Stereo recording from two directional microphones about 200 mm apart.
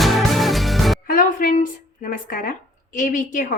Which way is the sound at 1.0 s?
45° left (ahead or behind).